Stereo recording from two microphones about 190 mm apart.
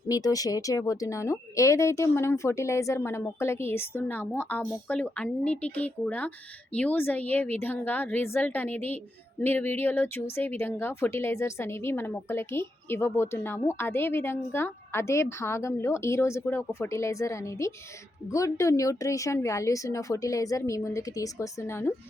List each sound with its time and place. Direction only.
0.1 s a woman's voice: 20° left (ahead or behind)